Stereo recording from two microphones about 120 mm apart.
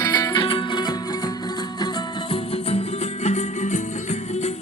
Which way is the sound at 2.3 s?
55° left (ahead or behind).